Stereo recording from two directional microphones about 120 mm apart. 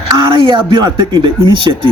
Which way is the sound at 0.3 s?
40° right (ahead or behind).